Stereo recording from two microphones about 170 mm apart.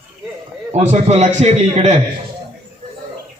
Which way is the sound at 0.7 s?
40° right (ahead or behind).